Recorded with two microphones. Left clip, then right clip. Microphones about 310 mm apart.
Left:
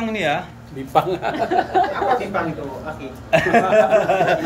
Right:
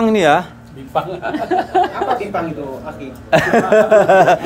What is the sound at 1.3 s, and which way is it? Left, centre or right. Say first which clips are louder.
Speech: right 3 dB; right.